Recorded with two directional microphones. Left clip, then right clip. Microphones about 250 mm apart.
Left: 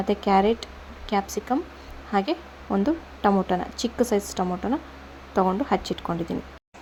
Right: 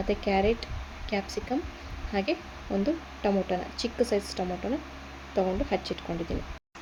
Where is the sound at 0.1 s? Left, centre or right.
Left.